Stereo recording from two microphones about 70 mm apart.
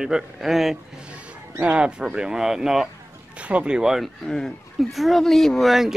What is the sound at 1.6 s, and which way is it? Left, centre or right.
Speech, centre.